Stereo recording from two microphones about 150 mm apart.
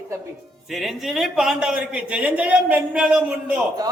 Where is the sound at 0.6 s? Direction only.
Centre (ahead or behind).